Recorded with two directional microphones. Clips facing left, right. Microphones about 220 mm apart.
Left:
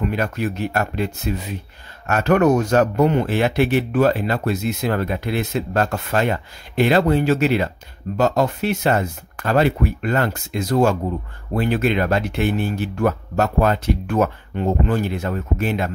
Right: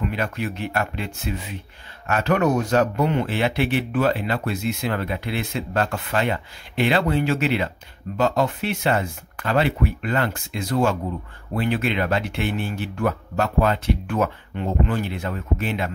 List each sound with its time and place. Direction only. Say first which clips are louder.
0.0 s speech: left 4 dB; 45° left (ahead or behind)